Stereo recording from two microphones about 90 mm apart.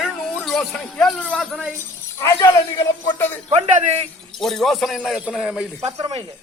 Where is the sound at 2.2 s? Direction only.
40° left (ahead or behind).